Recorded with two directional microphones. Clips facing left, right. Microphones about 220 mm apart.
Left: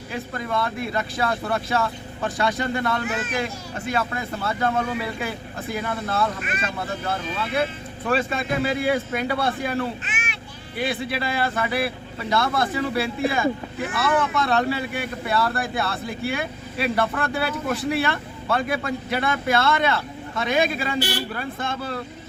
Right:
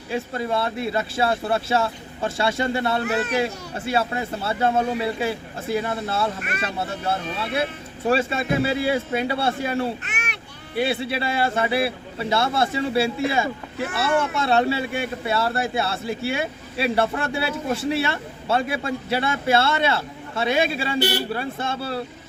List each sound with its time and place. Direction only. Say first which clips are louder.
0.1 s speech: right 3 dB; 30° right (ahead or behind)
3.1 s a child's voice: right 4 dB; 65° right (ahead or behind)
3.3 s speech: right 4 dB; 30° right (ahead or behind)
10.0 s a sound: even; 65° right (ahead or behind)
10.8 s speech: right 3 dB; 30° right (ahead or behind)
14.4 s speech: right 2 dB; 25° right (ahead or behind)